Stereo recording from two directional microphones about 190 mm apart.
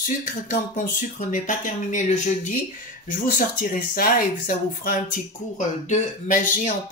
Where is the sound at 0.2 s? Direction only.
45° left (ahead or behind).